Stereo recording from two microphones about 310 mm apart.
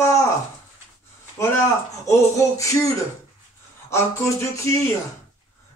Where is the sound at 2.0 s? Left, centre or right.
Centre.